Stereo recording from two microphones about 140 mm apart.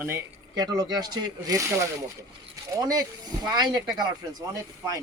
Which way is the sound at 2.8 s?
25° right (ahead or behind).